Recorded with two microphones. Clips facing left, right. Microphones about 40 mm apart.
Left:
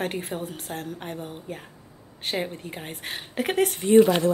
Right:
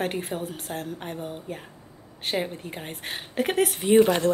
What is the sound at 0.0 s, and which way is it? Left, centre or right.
A woman's voice, centre.